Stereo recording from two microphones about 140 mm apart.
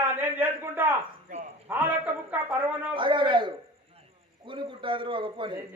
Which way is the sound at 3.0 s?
35° right (ahead or behind).